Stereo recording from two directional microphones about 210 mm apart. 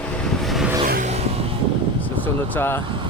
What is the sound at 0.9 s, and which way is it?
Vehicle, 35° right (ahead or behind).